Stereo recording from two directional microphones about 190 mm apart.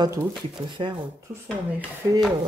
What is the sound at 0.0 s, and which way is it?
Speech, 15° right (ahead or behind).